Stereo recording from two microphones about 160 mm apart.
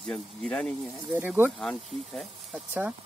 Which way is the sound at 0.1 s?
5° left (ahead or behind).